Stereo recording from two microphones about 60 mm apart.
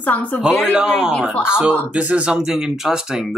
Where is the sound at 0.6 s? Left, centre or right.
Centre.